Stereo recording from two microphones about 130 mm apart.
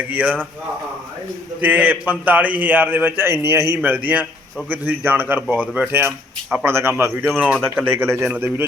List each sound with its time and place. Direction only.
0.1 s a man's voice: 10° right (ahead or behind)
1.6 s a man's voice: 15° right (ahead or behind)